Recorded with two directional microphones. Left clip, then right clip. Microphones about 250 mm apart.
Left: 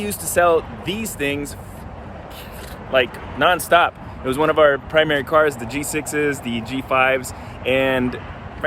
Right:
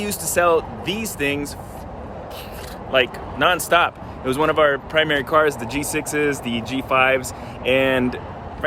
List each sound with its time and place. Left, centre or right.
0.0 s speech: centre
2.9 s speech: centre